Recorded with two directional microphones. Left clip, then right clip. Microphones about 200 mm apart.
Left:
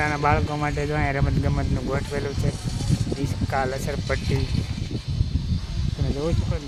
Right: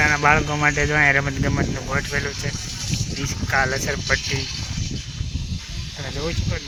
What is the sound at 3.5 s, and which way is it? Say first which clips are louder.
Speech: right 5 dB; 5° right (ahead or behind).